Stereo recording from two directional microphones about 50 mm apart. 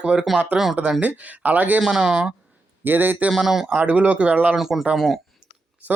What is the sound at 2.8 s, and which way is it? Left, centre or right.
Speech, right.